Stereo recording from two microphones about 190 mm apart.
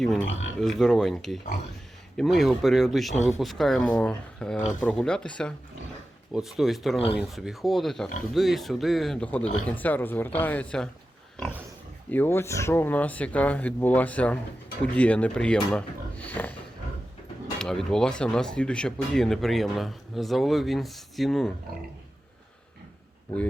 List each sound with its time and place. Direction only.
0.3 s speech: 90° left
0.6 s speech: centre (ahead or behind)
12.1 s speech: 10° left (ahead or behind)
17.6 s speech: 5° left (ahead or behind)